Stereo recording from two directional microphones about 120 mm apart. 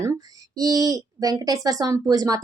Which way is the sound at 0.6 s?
30° right (ahead or behind).